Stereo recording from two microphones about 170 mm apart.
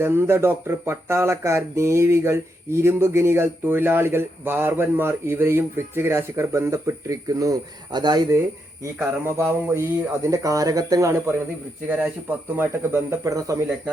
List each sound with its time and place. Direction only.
0.0 s speech: 15° right (ahead or behind)